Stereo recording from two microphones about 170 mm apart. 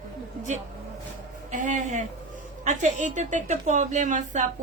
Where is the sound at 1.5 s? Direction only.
45° right (ahead or behind).